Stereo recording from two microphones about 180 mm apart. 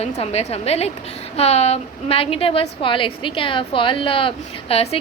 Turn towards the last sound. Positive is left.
turn(degrees=30)  # may be behind; listen again after turning